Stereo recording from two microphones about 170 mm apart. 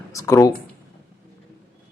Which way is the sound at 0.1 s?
20° left (ahead or behind).